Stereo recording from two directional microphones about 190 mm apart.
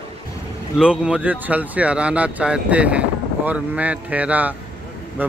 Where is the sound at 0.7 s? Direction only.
5° right (ahead or behind).